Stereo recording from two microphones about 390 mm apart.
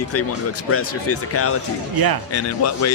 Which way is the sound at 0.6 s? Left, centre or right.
Left.